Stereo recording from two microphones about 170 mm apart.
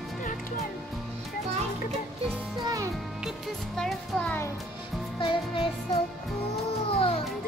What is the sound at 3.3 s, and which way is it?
Music, 5° left (ahead or behind).